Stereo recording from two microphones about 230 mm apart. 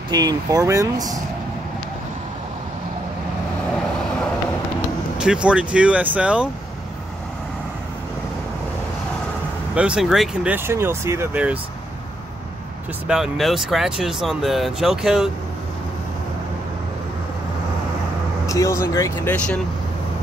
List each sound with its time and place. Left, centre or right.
0.1 s speech: centre
5.2 s speech: centre
9.8 s speech: centre
13.0 s speech: centre
18.5 s speech: centre